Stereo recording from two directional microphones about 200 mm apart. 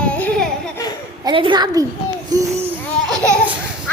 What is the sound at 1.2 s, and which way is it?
A woman's voice, 25° right (ahead or behind).